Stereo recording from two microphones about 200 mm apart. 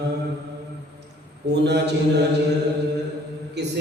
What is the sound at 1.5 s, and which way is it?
Mantra, 55° right (ahead or behind).